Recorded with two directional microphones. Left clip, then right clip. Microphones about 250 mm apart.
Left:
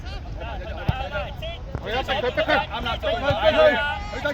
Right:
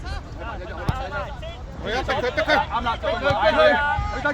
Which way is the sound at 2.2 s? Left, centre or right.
Right.